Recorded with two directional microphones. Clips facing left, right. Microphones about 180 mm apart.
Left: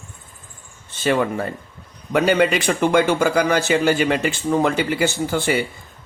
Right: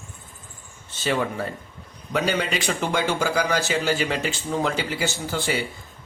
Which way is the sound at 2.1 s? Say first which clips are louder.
Left 7 dB; 55° left (ahead or behind).